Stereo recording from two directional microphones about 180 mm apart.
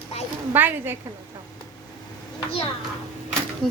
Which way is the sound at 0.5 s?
10° right (ahead or behind).